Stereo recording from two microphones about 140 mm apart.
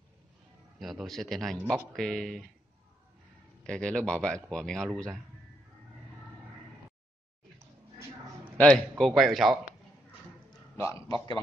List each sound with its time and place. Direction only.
0.7 s speech: centre (ahead or behind)
3.6 s speech: 5° left (ahead or behind)
8.5 s speech: 10° left (ahead or behind)
10.8 s a man's voice: 20° left (ahead or behind)